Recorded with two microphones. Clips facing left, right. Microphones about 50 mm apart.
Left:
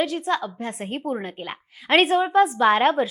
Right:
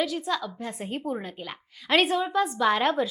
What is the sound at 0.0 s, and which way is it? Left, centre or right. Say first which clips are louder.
A woman's voice: left 4 dB; left.